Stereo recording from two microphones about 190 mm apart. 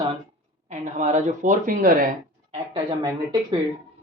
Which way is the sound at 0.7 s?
40° right (ahead or behind).